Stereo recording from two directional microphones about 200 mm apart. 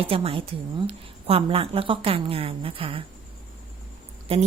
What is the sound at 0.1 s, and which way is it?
A woman's voice, 30° right (ahead or behind).